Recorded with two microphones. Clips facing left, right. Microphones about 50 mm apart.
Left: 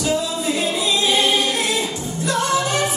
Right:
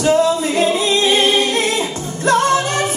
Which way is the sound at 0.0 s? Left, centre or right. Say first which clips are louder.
Right 7 dB; right.